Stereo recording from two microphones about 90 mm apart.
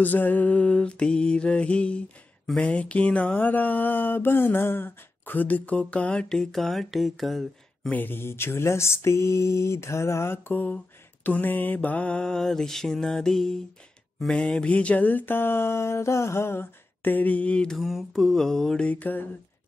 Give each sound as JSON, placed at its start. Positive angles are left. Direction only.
{"t": 0.0, "sound": "mantra", "side_deg": 20}
{"t": 7.9, "sound": "a sound", "side_deg": 20}
{"t": 11.2, "sound": "mantra", "side_deg": 20}